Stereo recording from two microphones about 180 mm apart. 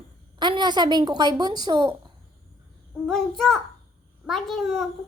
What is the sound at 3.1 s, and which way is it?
A child's voice, centre (ahead or behind).